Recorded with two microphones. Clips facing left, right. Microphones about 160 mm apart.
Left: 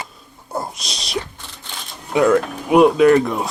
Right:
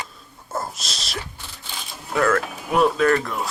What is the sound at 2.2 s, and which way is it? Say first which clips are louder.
Speech: left 6 dB; 15° left (ahead or behind).